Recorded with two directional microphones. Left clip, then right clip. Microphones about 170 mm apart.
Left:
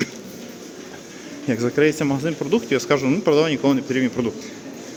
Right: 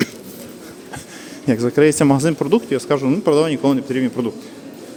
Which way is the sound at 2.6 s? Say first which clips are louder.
Right 1 dB; 10° right (ahead or behind).